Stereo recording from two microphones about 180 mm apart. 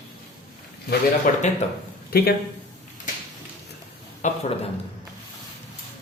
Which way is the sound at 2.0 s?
60° left (ahead or behind).